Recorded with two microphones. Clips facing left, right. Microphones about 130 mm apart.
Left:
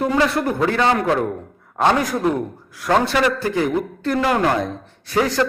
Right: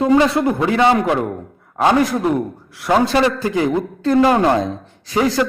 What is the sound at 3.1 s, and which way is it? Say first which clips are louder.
A man's voice: right 3 dB; 30° right (ahead or behind).